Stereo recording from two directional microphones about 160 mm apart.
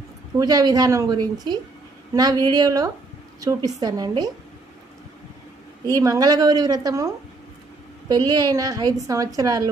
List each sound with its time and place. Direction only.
0.4 s a woman's voice: 25° right (ahead or behind)
5.9 s a woman's voice: 20° right (ahead or behind)
8.1 s a woman's voice: 25° right (ahead or behind)